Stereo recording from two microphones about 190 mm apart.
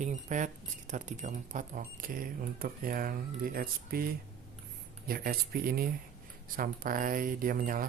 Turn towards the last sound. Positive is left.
turn(degrees=-45)  # may be behind; listen again after turning